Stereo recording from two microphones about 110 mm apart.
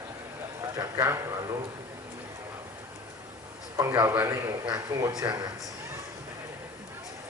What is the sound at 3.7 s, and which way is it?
Speech, 35° right (ahead or behind).